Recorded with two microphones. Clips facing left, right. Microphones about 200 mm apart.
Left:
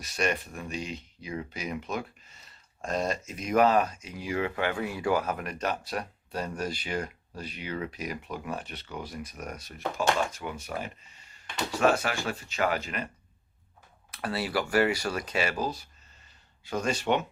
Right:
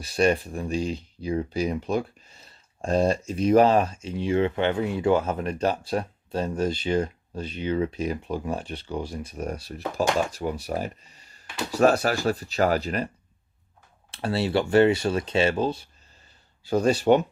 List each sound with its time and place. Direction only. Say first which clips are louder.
0.0 s speech: right 8 dB; 30° right (ahead or behind)
14.1 s speech: right 6 dB; 30° right (ahead or behind)